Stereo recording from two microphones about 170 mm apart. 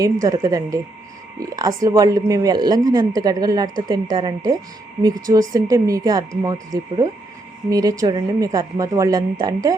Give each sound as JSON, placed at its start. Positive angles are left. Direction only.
{"t": 0.0, "sound": "speech", "side_deg": -20}